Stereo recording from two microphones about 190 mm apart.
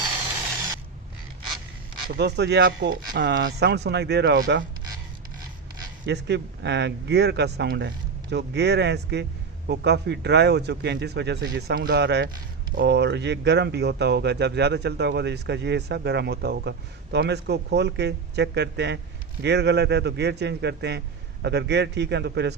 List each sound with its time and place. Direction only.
2.0 s speech: 60° right (ahead or behind)
6.1 s speech: 65° right (ahead or behind)